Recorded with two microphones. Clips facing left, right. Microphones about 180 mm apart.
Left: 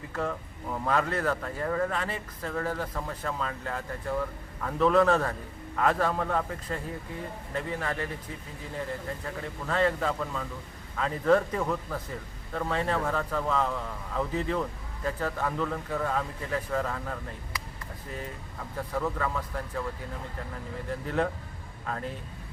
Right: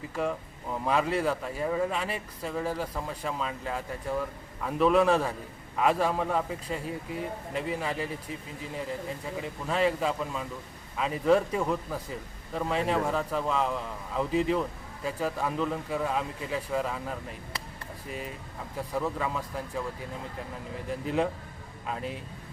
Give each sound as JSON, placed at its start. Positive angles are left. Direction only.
{"t": 0.1, "sound": "speech", "side_deg": -10}
{"t": 9.2, "sound": "speech", "side_deg": -15}
{"t": 18.8, "sound": "speech", "side_deg": -15}
{"t": 21.8, "sound": "speech", "side_deg": -15}